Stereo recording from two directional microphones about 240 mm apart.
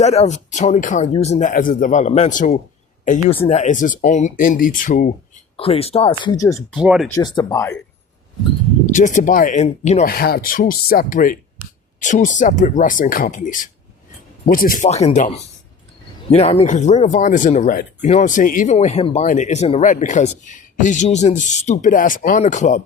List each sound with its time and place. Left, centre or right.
0.0 s speech: left
5.5 s speech: left
6.5 s speech: centre
7.1 s speech: centre
8.9 s speech: left